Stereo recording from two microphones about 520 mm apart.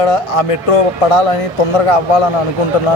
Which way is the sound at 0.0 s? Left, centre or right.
Left.